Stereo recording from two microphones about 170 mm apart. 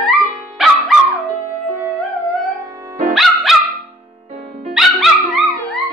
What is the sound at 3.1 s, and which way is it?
Dog, centre (ahead or behind).